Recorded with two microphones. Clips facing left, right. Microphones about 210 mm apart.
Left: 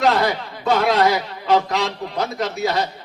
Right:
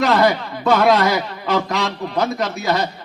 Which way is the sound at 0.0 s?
65° right (ahead or behind).